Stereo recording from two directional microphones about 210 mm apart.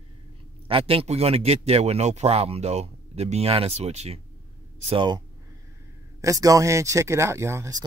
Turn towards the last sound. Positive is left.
turn(degrees=-15)  # may be behind; listen again after turning